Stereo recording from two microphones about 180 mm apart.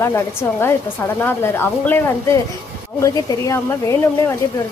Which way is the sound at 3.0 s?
20° left (ahead or behind).